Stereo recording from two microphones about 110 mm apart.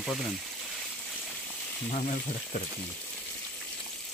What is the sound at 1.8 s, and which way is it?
Speech, 75° left (ahead or behind).